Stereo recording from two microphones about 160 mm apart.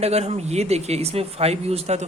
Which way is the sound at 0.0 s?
40° right (ahead or behind).